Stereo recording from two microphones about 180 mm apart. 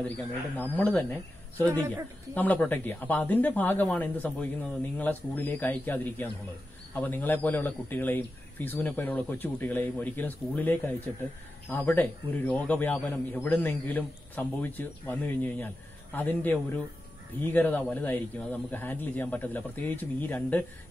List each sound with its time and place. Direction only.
0.6 s a man's voice: 10° left (ahead or behind)